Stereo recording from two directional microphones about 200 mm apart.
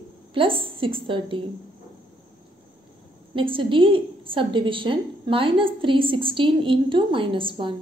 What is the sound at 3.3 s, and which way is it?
A woman's voice, 25° right (ahead or behind).